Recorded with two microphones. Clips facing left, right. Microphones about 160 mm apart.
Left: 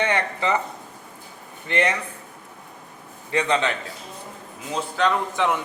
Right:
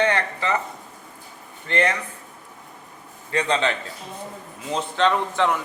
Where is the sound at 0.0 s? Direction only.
15° left (ahead or behind).